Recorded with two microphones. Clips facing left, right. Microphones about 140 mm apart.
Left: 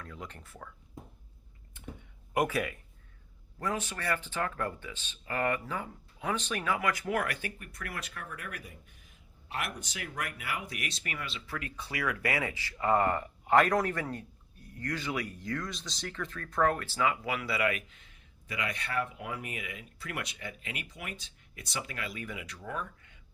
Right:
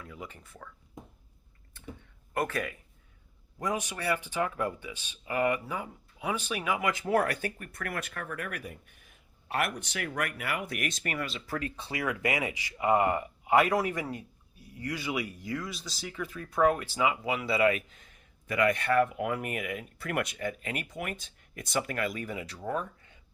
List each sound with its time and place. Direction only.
0.0 s speech: 5° right (ahead or behind)
2.3 s speech: 10° left (ahead or behind)
3.6 s speech: 15° right (ahead or behind); by 23.1 s 35° right (ahead or behind)